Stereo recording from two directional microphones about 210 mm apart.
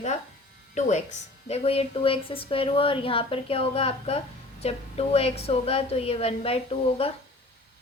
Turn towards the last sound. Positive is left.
turn(degrees=25)  # may be behind; listen again after turning